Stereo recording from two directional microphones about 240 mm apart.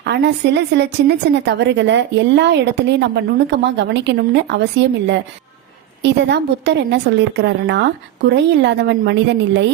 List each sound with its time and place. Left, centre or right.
0.0 s a woman's voice: right